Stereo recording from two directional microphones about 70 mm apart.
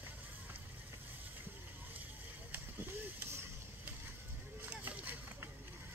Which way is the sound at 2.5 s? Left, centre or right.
Right.